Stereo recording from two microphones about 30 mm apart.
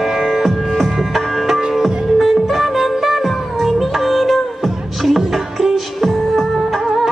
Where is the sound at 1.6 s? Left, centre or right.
Centre.